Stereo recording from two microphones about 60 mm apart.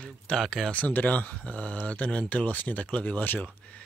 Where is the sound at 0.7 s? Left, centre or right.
Left.